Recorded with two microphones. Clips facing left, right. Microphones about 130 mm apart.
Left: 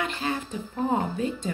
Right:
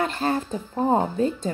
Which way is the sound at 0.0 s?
40° right (ahead or behind).